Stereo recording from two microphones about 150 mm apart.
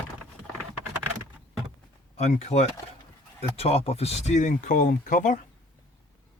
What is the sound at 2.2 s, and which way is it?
Speech, 45° left (ahead or behind).